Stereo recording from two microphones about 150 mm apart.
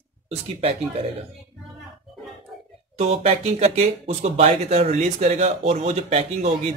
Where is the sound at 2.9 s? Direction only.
45° right (ahead or behind).